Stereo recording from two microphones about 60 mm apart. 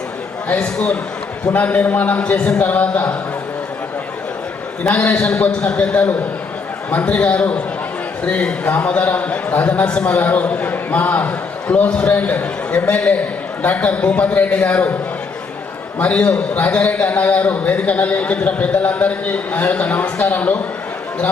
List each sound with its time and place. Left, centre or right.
0.4 s a man's voice: left
4.8 s a man's voice: left
16.0 s a man's voice: left